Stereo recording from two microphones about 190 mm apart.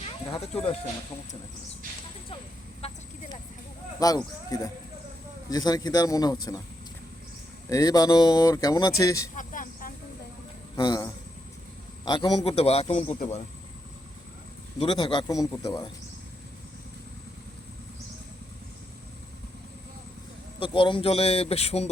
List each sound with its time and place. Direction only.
2.8 s vehicle: 35° left (ahead or behind)
4.0 s speech: 20° left (ahead or behind)
7.7 s speech: 20° left (ahead or behind)
9.3 s cricket: 45° left (ahead or behind)
10.8 s a man's voice: 20° left (ahead or behind); by 13.4 s 40° left (ahead or behind)
14.8 s speech: 25° left (ahead or behind)
20.6 s a man's voice: 25° left (ahead or behind)